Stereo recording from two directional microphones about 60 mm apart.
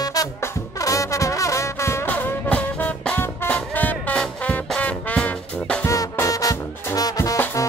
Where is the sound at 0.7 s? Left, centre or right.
Left.